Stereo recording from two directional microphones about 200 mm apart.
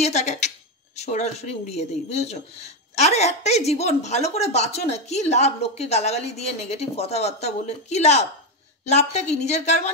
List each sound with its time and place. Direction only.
0.0 s speech: 35° left (ahead or behind)